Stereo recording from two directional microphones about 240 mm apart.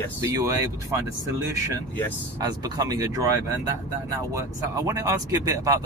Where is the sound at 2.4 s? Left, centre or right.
Centre.